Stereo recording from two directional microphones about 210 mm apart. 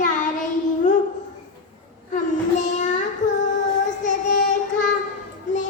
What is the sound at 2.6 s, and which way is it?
Child singing, 35° left (ahead or behind).